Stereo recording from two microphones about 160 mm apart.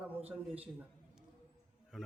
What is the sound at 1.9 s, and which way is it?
Speech, 5° right (ahead or behind).